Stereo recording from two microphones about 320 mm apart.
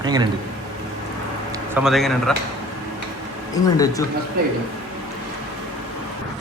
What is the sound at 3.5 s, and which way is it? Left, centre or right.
Speech, centre.